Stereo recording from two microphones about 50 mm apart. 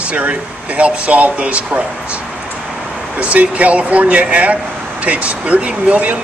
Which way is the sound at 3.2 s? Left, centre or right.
Right.